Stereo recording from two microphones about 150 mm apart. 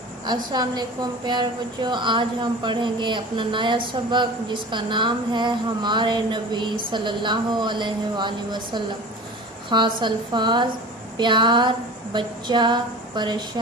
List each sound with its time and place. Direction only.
0.3 s a woman's voice: 30° right (ahead or behind)